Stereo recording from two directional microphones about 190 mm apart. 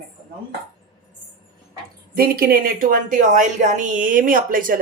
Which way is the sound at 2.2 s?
50° right (ahead or behind).